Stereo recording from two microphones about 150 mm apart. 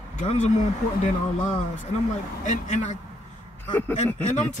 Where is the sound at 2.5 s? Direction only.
55° left (ahead or behind).